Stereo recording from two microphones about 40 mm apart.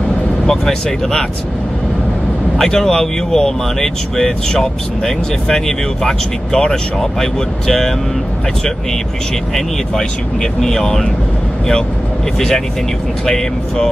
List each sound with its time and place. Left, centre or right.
0.5 s speech: centre
2.6 s speech: centre
10.6 s speech: centre
12.4 s speech: centre